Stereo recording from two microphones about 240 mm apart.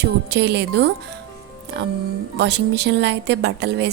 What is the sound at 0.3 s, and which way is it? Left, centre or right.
A woman's voice, right.